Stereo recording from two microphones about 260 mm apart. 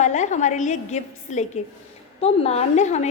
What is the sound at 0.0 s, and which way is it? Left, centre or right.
A woman's voice, left.